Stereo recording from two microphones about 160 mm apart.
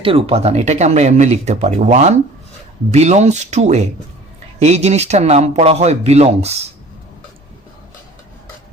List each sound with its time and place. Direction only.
0.0 s speech: 35° right (ahead or behind)